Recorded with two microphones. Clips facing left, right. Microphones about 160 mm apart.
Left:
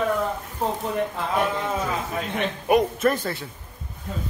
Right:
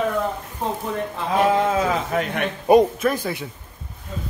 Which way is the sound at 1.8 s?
70° right (ahead or behind).